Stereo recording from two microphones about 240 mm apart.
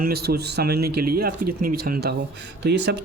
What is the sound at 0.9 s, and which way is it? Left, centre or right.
Speech, right.